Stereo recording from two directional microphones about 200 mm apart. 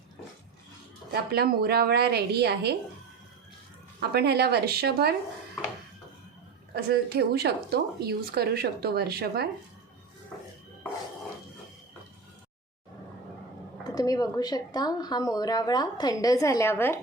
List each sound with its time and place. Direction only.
1.1 s a woman's voice: 50° right (ahead or behind)
4.1 s a woman's voice: 55° right (ahead or behind)
6.7 s a woman's voice: 50° right (ahead or behind)
13.8 s speech: 20° left (ahead or behind)